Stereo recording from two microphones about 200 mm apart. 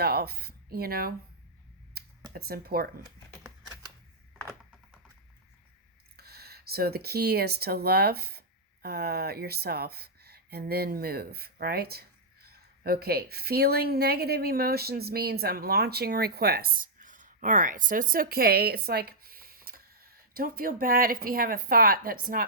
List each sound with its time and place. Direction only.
0.0 s speech: 50° right (ahead or behind)
2.0 s a sound: 50° right (ahead or behind)
2.3 s speech: 50° right (ahead or behind)
3.0 s typewriter: 20° right (ahead or behind)
4.4 s a sound: 5° left (ahead or behind)
6.1 s speech: 50° right (ahead or behind)